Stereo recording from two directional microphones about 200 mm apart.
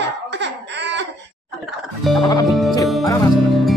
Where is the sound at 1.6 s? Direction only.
Centre (ahead or behind).